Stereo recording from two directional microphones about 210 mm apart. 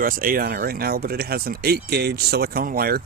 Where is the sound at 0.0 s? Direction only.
45° right (ahead or behind).